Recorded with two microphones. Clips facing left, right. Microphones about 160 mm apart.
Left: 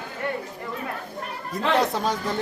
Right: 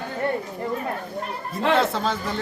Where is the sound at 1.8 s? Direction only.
15° left (ahead or behind).